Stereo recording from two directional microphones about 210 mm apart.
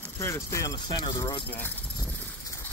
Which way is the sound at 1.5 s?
10° left (ahead or behind).